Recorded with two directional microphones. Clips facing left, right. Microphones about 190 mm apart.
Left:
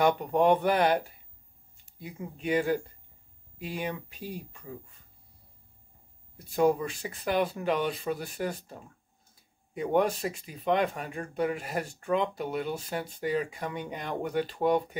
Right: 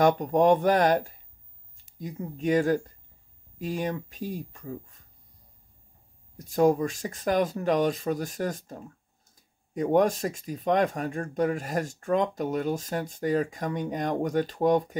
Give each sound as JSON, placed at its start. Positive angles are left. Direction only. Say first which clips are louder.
{"t": 0.0, "sound": "speech", "louder": "right 3 dB", "side_deg": -40}
{"t": 6.3, "sound": "speech", "louder": "right 3 dB", "side_deg": -40}